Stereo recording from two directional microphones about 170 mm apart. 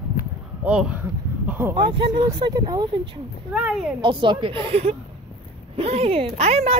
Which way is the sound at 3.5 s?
5° right (ahead or behind).